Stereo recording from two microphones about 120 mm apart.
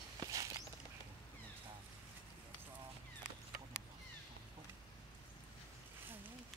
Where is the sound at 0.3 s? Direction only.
30° right (ahead or behind).